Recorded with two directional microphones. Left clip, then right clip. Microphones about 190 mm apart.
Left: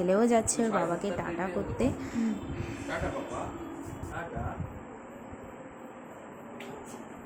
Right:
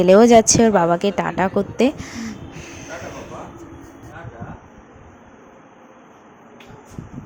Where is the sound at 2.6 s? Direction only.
25° right (ahead or behind).